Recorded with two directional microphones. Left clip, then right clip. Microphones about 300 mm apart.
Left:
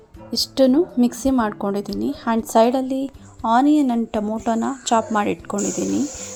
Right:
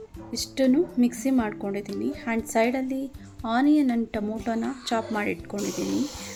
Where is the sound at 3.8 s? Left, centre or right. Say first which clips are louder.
Left 5 dB; centre.